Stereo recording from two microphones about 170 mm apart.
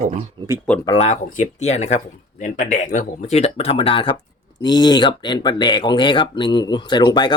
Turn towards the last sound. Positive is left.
turn(degrees=25)  # may be behind; listen again after turning